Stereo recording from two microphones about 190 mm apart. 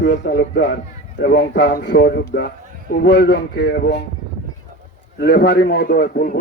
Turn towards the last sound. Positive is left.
turn(degrees=50)  # may be behind; listen again after turning